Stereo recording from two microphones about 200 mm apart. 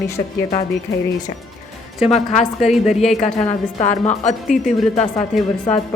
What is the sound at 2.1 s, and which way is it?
Speech, 35° left (ahead or behind).